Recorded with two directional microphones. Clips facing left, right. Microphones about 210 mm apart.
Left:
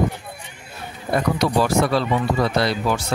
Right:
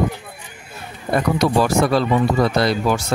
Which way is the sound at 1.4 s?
45° right (ahead or behind).